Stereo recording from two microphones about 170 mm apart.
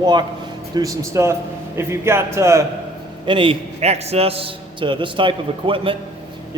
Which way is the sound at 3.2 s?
30° right (ahead or behind).